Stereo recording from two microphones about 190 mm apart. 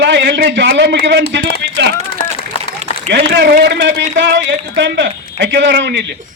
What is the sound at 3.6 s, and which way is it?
A man's voice, 70° right (ahead or behind).